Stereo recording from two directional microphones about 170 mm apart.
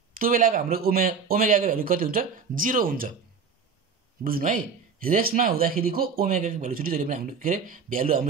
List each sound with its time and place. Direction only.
0.1 s speech: 55° right (ahead or behind)
4.2 s speech: 55° right (ahead or behind)